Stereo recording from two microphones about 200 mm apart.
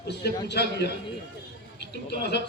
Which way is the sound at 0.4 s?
55° left (ahead or behind).